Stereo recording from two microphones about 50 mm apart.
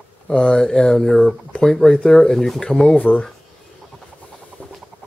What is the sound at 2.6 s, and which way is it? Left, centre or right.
Speech, centre.